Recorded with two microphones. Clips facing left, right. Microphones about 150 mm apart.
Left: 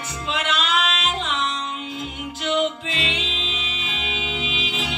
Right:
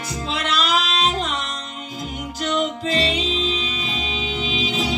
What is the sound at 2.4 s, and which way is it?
Music, 40° right (ahead or behind).